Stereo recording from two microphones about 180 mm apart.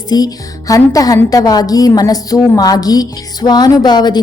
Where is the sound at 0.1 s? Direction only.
20° left (ahead or behind).